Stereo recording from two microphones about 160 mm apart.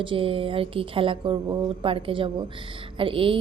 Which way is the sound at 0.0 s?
35° right (ahead or behind).